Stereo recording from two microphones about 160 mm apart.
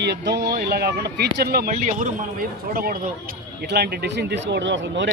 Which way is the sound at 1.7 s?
50° right (ahead or behind).